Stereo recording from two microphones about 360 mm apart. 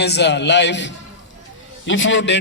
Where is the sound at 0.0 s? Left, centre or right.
Left.